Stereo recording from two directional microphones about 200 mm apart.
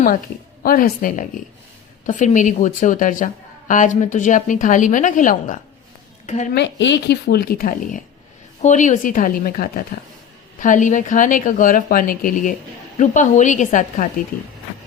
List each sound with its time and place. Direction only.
0.6 s a woman's voice: 45° left (ahead or behind)
6.5 s a woman's voice: 60° left (ahead or behind); by 14.1 s 40° left (ahead or behind)